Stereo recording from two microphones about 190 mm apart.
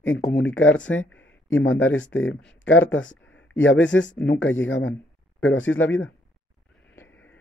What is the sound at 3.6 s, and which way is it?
Speech, 80° left.